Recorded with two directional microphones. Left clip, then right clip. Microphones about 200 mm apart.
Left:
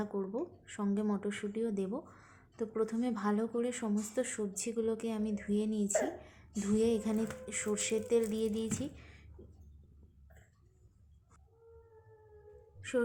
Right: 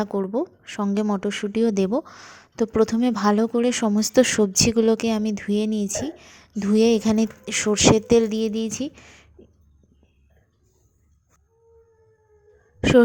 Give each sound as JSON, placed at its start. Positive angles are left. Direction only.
{"t": 0.0, "sound": "a woman's voice", "side_deg": -40}